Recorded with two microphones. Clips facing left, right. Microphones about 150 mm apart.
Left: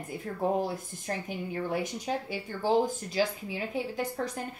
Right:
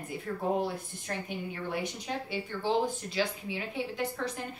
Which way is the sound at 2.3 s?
40° left (ahead or behind).